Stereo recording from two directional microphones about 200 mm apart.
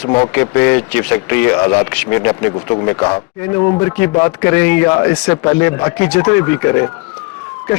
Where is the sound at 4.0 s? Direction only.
10° left (ahead or behind).